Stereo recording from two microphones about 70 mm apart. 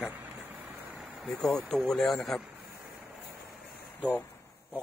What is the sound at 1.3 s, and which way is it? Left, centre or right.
Speech, centre.